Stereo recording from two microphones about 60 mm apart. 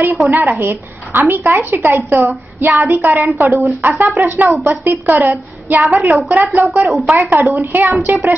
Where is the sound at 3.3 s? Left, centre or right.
Right.